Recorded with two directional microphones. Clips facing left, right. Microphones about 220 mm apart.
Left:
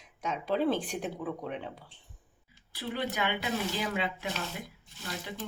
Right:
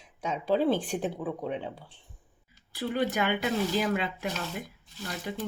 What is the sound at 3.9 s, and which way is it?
Speech, 45° right (ahead or behind).